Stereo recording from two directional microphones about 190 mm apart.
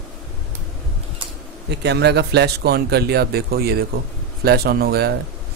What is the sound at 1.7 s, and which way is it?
A man's voice, 60° right (ahead or behind).